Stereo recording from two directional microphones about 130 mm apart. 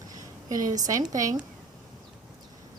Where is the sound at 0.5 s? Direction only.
90° right.